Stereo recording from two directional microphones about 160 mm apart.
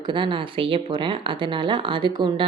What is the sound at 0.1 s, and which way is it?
A woman's voice, 30° right (ahead or behind).